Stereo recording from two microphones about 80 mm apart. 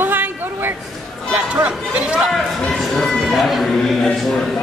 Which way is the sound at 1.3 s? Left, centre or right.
Centre.